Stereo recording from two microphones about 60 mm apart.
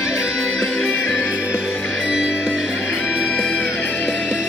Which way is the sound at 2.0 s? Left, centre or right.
Centre.